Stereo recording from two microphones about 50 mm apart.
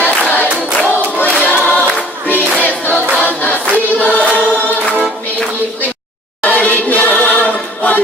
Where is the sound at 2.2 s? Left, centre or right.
Left.